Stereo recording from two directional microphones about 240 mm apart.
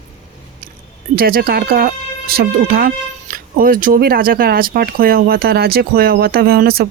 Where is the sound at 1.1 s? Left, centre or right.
Right.